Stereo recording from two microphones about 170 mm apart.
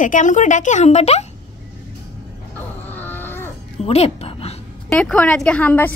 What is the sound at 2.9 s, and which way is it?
Livestock, 10° left (ahead or behind).